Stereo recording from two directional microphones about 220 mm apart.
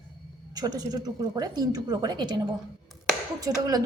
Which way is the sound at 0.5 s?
15° right (ahead or behind).